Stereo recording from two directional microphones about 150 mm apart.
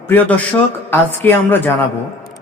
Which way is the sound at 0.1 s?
10° left (ahead or behind).